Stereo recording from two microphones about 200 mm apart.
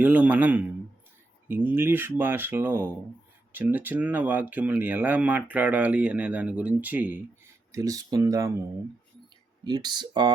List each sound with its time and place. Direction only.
0.0 s speech: 10° right (ahead or behind)
9.6 s speech: 20° right (ahead or behind)